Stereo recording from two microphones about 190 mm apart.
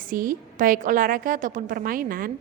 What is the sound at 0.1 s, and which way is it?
A woman's voice, 45° right (ahead or behind).